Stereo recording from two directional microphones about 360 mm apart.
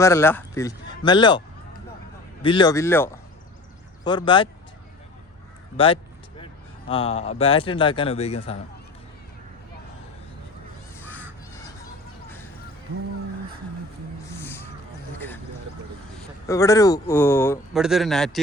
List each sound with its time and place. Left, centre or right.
0.0 s speech: centre
2.4 s speech: centre
5.7 s speech: centre
14.3 s a sound: centre
16.5 s speech: centre